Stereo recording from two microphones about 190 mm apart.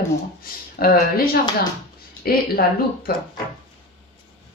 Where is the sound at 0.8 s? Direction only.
50° left (ahead or behind).